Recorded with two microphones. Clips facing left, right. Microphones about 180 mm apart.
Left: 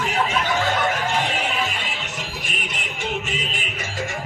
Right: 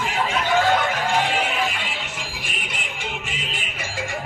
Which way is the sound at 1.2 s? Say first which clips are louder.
Right 1 dB; 45° left (ahead or behind).